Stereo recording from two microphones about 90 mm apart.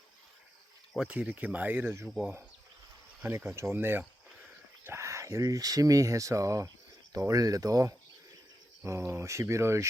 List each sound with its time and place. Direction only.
0.9 s speech: 15° right (ahead or behind)
3.2 s speech: 25° right (ahead or behind)